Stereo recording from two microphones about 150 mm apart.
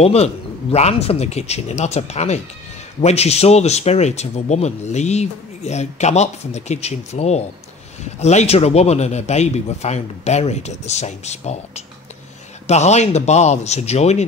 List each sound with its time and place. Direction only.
0.0 s speech: 45° left (ahead or behind)